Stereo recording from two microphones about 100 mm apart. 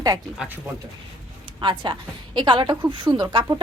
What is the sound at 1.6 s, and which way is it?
A woman's voice, 50° right (ahead or behind).